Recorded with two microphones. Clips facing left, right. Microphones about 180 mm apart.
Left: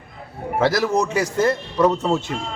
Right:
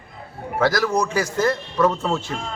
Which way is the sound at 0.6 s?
25° left (ahead or behind).